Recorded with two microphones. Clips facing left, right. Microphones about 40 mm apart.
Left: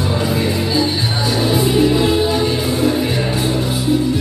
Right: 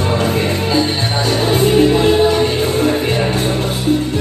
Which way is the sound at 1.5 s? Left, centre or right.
Right.